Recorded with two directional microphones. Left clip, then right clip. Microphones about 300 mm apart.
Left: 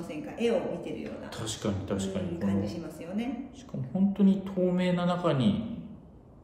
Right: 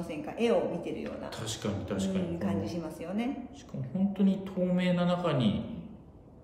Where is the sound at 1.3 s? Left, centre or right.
Centre.